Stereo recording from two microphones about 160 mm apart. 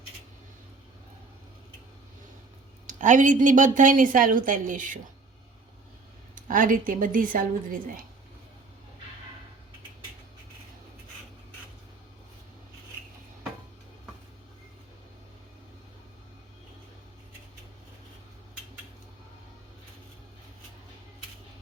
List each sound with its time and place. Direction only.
2.8 s a woman's voice: 50° right (ahead or behind)
6.3 s a woman's voice: 55° right (ahead or behind)